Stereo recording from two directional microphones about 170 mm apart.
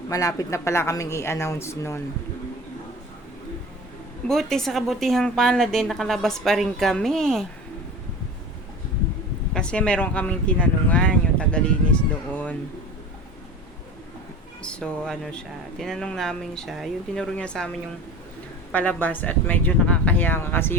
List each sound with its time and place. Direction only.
0.1 s speech: 20° left (ahead or behind)
4.3 s a woman's voice: centre (ahead or behind)
9.5 s speech: 5° left (ahead or behind)
14.6 s a woman's voice: 5° left (ahead or behind)
18.7 s speech: 10° left (ahead or behind)